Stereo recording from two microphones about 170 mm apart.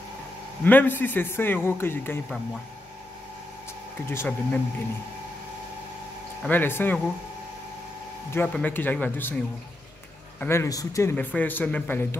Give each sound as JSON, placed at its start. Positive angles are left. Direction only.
{"t": 0.7, "sound": "speech", "side_deg": 10}
{"t": 4.0, "sound": "speech", "side_deg": 15}
{"t": 6.4, "sound": "speech", "side_deg": 10}
{"t": 8.3, "sound": "speech", "side_deg": 10}
{"t": 10.4, "sound": "speech", "side_deg": 15}